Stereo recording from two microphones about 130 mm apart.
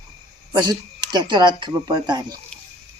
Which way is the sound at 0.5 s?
35° right (ahead or behind).